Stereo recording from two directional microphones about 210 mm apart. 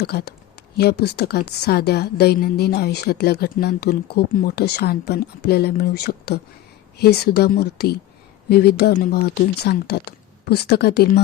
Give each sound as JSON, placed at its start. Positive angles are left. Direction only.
{"t": 0.0, "sound": "a woman's voice", "side_deg": 50}